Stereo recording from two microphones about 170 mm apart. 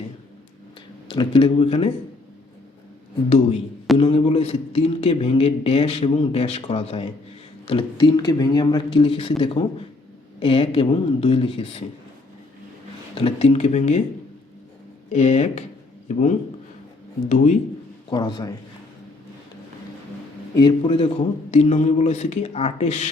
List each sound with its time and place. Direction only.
1.1 s a man's voice: 30° left (ahead or behind)
3.2 s a man's voice: 40° left (ahead or behind)
13.1 s a man's voice: 35° left (ahead or behind)
15.1 s a man's voice: 40° left (ahead or behind)
17.2 s speech: 45° left (ahead or behind)
18.1 s a man's voice: 25° left (ahead or behind)
20.6 s a man's voice: 30° left (ahead or behind)